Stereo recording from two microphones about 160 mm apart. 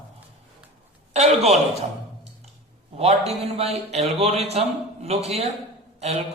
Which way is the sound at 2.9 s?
40° right (ahead or behind).